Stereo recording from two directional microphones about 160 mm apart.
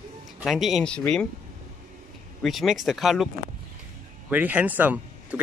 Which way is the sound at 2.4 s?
Centre (ahead or behind).